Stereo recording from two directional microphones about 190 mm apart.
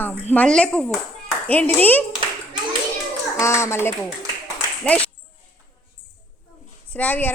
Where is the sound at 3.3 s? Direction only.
15° left (ahead or behind).